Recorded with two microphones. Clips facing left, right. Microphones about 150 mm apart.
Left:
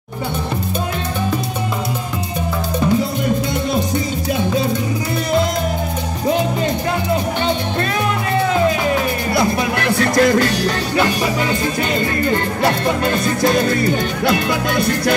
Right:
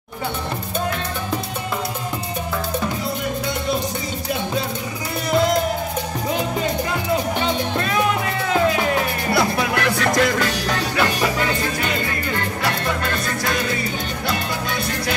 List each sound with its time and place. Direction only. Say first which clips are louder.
9.3 s music: left 1 dB; 20° left (ahead or behind)
9.8 s music: left 4 dB; 30° left (ahead or behind)
11.0 s music: left 3 dB; 20° left (ahead or behind)
13.6 s music: left 8 dB; 45° left (ahead or behind)
14.2 s music: left 7 dB; 70° left (ahead or behind)